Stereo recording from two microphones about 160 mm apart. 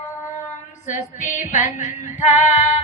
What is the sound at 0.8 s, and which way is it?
Female singing, 50° left (ahead or behind).